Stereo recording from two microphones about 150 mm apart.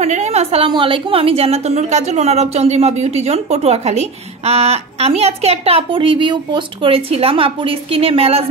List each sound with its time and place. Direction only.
0.0 s a woman's voice: 50° right (ahead or behind)
0.7 s a woman's voice: 35° right (ahead or behind)